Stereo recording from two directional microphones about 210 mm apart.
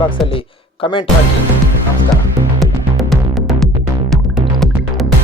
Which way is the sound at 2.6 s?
Centre (ahead or behind).